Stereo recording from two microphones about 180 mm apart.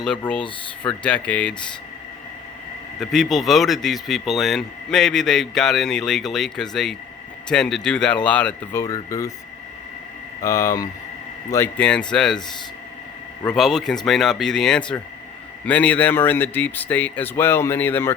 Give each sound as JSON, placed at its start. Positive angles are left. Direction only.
{"t": 0.2, "sound": "speech", "side_deg": 5}
{"t": 3.0, "sound": "a man's voice", "side_deg": 0}
{"t": 8.8, "sound": "speech", "side_deg": 20}
{"t": 10.4, "sound": "a man's voice", "side_deg": 20}
{"t": 13.5, "sound": "a man's voice", "side_deg": 0}